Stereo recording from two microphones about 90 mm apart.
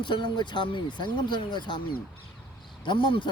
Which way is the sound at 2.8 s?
75° left (ahead or behind).